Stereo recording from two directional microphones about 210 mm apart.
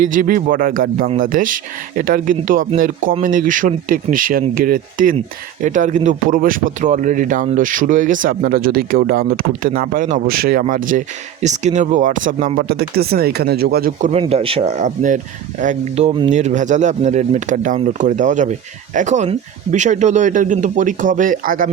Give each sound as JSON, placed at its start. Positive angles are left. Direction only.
{"t": 0.1, "sound": "speech", "side_deg": -40}
{"t": 14.1, "sound": "speech", "side_deg": -30}